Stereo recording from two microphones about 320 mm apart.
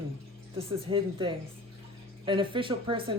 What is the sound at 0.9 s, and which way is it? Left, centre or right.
Speech, centre.